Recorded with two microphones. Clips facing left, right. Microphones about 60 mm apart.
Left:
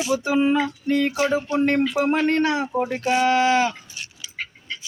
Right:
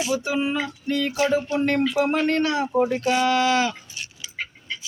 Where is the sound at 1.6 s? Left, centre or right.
Left.